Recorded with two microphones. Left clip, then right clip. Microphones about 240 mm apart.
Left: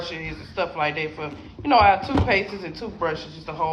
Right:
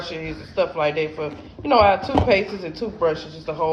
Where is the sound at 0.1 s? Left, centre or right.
Centre.